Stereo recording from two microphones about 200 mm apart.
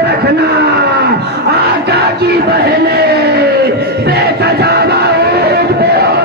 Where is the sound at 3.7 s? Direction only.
55° right (ahead or behind).